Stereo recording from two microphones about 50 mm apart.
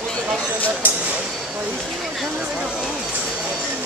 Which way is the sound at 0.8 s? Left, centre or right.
Right.